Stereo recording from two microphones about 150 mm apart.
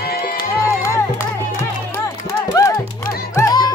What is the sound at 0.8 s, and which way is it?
Music, 20° left (ahead or behind).